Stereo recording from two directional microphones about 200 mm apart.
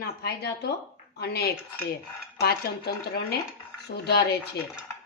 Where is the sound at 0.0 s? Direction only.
55° left (ahead or behind).